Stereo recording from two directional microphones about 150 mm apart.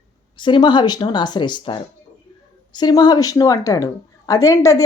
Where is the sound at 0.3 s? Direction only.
30° left (ahead or behind).